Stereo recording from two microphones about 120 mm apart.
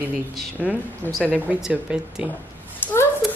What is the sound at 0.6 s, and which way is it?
Speech, 10° right (ahead or behind).